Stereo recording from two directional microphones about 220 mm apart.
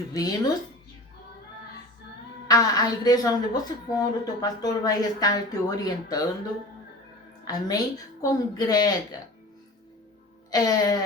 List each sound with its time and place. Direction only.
0.1 s a woman's voice: 15° left (ahead or behind)
2.5 s a woman's voice: 15° left (ahead or behind)
7.4 s a woman's voice: 15° left (ahead or behind)
10.5 s a woman's voice: 15° left (ahead or behind)